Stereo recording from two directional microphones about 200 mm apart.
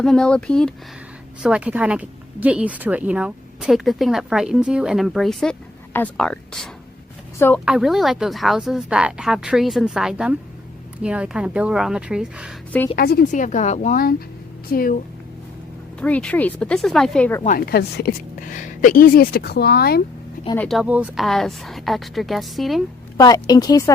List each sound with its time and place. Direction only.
0.0 s speech: 5° left (ahead or behind)
7.6 s speech: 5° right (ahead or behind)
13.0 s a woman's voice: 50° left (ahead or behind)
16.0 s speech: 5° left (ahead or behind)
17.4 s a woman's voice: 45° left (ahead or behind)
20.6 s speech: centre (ahead or behind)
23.1 s speech: 20° left (ahead or behind)